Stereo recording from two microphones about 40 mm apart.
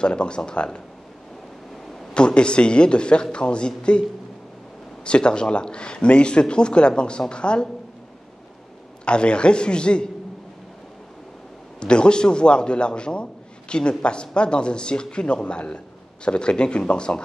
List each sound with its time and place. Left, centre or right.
0.0 s a man's voice: left
2.1 s a man's voice: left
5.0 s a man's voice: left
9.0 s a man's voice: left
11.8 s a man's voice: left